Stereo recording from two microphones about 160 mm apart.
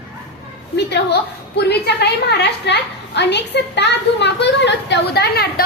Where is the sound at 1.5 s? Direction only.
90° left.